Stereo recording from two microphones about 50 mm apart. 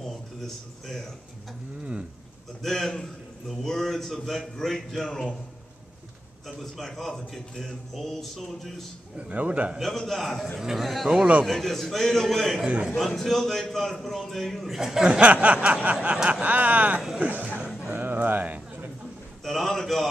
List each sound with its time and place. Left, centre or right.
0.0 s a sound: centre
2.6 s a man's voice: centre
6.4 s a man's voice: centre
9.3 s a sound: right
9.8 s a man's voice: centre
10.6 s speech: centre
11.4 s a man's voice: centre
12.6 s speech: centre
12.9 s a man's voice: centre
14.8 s speech: centre
15.0 s a sound: right
16.3 s speech: right
17.2 s a sound: right
19.4 s a man's voice: centre